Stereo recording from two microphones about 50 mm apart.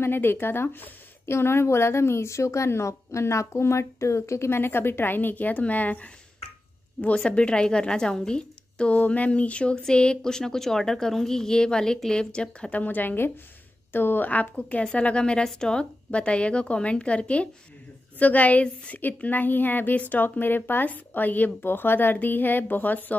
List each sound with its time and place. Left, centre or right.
0.0 s speech: left
1.2 s a woman's voice: left
7.2 s a woman's voice: left
12.8 s a woman's voice: left
15.0 s a woman's voice: left